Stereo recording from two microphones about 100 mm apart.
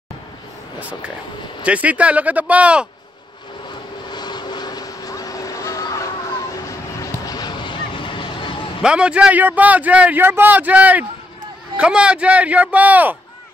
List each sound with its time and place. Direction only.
0.7 s a man's voice: 15° right (ahead or behind)
3.7 s vehicle: 45° left (ahead or behind)
8.8 s a man's voice: 10° right (ahead or behind)